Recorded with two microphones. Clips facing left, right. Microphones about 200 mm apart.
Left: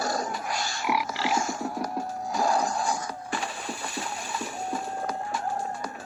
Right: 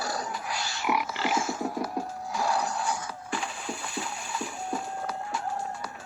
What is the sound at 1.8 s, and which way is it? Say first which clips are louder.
Music: left 2 dB; 45° left (ahead or behind).